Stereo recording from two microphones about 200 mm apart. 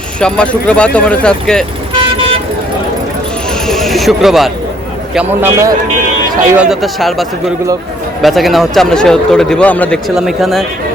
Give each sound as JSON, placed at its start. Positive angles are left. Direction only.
{"t": 0.2, "sound": "speech", "side_deg": 5}
{"t": 1.9, "sound": "toot", "side_deg": -25}
{"t": 3.5, "sound": "speech", "side_deg": 0}
{"t": 5.1, "sound": "speech", "side_deg": -10}